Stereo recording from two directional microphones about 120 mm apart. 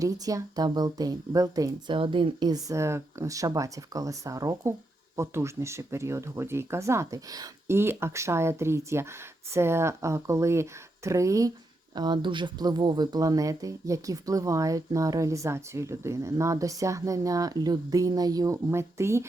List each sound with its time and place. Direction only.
0.0 s speech: 30° right (ahead or behind)
1.9 s speech: 45° right (ahead or behind); by 11.5 s 25° right (ahead or behind)
11.9 s speech: 40° right (ahead or behind)